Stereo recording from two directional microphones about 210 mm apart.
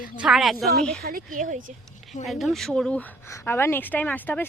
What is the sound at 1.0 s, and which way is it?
Speech, 40° right (ahead or behind).